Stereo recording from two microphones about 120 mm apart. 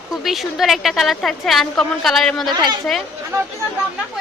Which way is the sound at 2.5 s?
35° right (ahead or behind).